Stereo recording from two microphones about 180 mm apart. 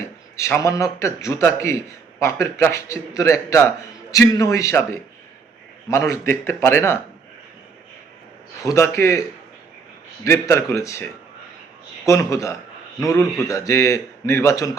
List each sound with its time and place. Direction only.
0.3 s a man's voice: 15° left (ahead or behind)
5.9 s a man's voice: 15° left (ahead or behind)
8.6 s a man's voice: 15° left (ahead or behind)
10.2 s a man's voice: 15° left (ahead or behind)